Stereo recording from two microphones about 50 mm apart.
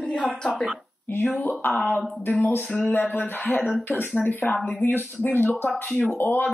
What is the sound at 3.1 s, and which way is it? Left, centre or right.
Speech, left.